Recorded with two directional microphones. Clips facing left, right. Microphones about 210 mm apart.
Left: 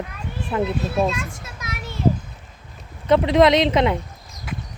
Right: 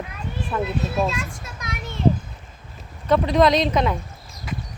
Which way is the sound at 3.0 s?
25° left (ahead or behind).